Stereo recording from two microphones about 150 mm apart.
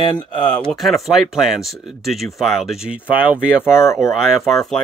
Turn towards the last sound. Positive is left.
turn(degrees=0)  # may be behind; listen again after turning